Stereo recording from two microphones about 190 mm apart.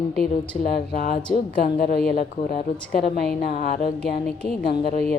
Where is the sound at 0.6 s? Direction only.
50° left (ahead or behind).